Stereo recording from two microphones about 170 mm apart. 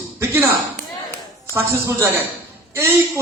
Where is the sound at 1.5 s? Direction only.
15° right (ahead or behind).